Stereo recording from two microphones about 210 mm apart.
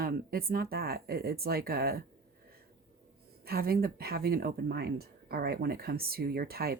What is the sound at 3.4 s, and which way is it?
Speech, 45° right (ahead or behind).